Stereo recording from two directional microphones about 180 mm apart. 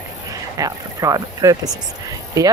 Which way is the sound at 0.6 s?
20° right (ahead or behind).